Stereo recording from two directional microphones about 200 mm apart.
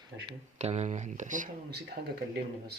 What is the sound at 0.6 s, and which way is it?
Speech, 35° right (ahead or behind).